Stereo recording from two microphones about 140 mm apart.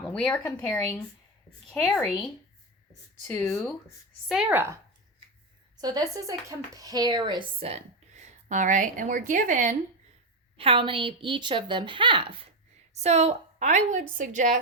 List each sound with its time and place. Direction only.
0.0 s speech: 5° left (ahead or behind)
4.3 s a woman's voice: 10° right (ahead or behind)
5.7 s a woman's voice: 30° right (ahead or behind)
7.6 s a woman's voice: 50° right (ahead or behind); by 9.7 s 65° right (ahead or behind)
10.6 s a woman's voice: 40° right (ahead or behind)
12.9 s a woman's voice: 50° right (ahead or behind)